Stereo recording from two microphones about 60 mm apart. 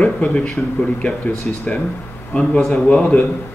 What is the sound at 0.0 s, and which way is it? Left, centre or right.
Speech, left.